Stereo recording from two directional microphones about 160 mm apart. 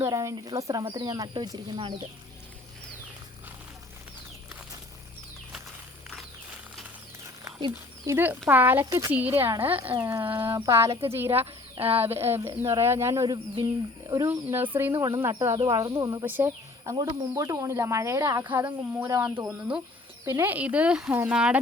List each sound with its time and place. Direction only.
0.0 s speech: 20° right (ahead or behind)
7.6 s speech: 15° right (ahead or behind)
9.7 s speech: 35° right (ahead or behind)
10.0 s speech: 15° right (ahead or behind)
11.3 s speech: 40° right (ahead or behind)
12.0 s speech: 15° right (ahead or behind)
14.5 s speech: 15° right (ahead or behind)
14.9 s speech: 30° right (ahead or behind); by 21.6 s 5° right (ahead or behind)